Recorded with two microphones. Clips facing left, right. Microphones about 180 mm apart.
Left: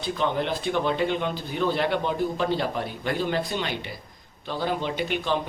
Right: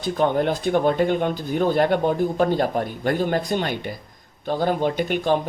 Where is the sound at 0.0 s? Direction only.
45° right (ahead or behind).